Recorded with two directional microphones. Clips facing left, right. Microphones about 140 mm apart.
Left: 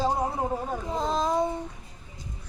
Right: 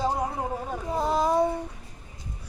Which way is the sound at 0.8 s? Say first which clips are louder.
Right 3 dB; 10° right (ahead or behind).